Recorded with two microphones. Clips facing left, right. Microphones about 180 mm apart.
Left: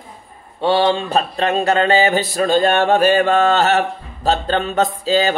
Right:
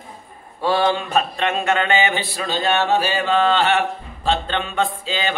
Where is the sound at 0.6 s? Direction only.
25° left (ahead or behind).